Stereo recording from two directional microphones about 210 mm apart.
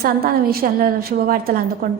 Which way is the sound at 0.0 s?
45° right (ahead or behind).